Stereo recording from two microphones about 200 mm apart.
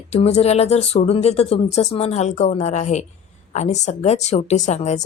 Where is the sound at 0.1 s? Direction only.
30° left (ahead or behind).